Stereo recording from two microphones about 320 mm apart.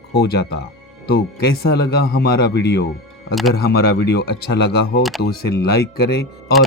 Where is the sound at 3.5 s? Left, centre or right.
Left.